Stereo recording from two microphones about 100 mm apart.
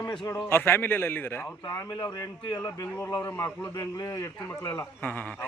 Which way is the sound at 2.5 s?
40° left (ahead or behind).